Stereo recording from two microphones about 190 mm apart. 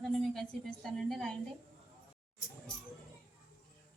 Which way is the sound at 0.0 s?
Centre (ahead or behind).